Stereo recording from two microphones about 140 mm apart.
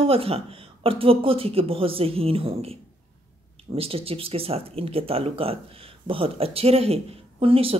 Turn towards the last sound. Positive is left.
turn(degrees=-40)  # may be behind; listen again after turning